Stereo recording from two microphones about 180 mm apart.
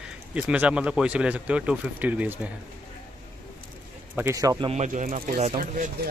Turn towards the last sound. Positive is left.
turn(degrees=-50)  # may be behind; listen again after turning